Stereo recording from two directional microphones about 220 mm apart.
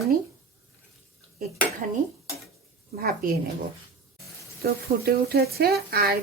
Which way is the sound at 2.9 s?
40° right (ahead or behind).